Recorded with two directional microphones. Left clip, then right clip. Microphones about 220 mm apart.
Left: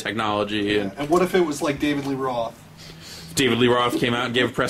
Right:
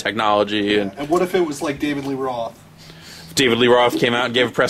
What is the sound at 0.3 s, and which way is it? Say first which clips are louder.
Speech: right 6 dB; centre (ahead or behind).